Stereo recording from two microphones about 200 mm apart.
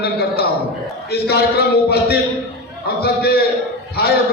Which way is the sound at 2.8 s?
50° left (ahead or behind).